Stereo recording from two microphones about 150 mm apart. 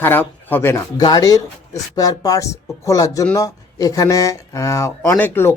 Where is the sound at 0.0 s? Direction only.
10° left (ahead or behind).